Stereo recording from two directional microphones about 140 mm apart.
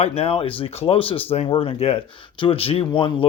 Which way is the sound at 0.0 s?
45° left (ahead or behind).